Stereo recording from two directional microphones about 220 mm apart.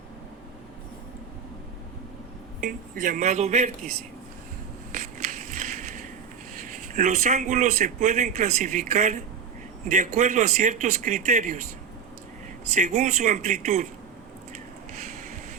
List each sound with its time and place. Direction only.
2.6 s speech: 40° right (ahead or behind)
4.9 s crushing: 35° right (ahead or behind)
6.5 s speech: 35° right (ahead or behind)
12.7 s speech: 30° right (ahead or behind)
14.5 s a sound: 35° right (ahead or behind)